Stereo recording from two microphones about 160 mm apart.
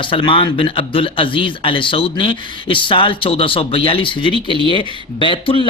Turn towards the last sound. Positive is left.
turn(degrees=35)  # may be behind; listen again after turning